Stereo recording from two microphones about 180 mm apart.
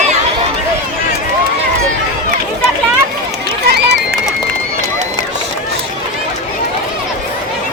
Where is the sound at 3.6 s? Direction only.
60° right (ahead or behind).